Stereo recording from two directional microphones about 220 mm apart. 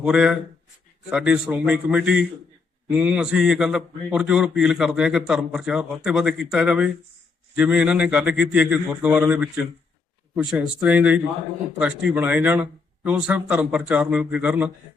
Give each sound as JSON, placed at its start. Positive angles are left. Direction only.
{"t": 0.0, "sound": "a man's voice", "side_deg": -5}